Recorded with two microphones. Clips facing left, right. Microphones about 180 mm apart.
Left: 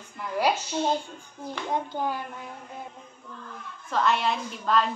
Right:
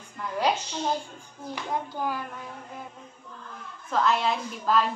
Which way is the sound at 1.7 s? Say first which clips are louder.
Left 1 dB; 25° left (ahead or behind).